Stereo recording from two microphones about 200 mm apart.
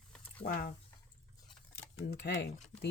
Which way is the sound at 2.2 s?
55° left (ahead or behind).